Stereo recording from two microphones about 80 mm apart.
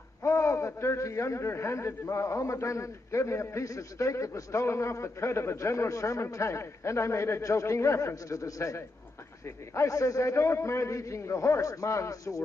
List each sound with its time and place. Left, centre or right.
0.2 s speech: left